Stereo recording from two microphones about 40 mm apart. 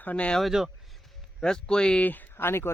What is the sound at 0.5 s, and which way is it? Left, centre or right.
Speech, centre.